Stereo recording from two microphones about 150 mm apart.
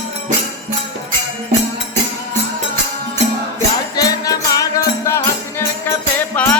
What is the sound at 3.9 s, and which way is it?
Music, 25° left (ahead or behind).